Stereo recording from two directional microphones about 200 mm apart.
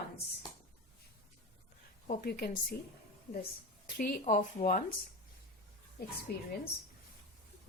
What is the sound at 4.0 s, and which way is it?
Speech, 45° left (ahead or behind).